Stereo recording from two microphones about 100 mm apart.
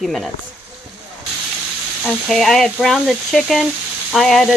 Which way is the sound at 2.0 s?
Centre (ahead or behind).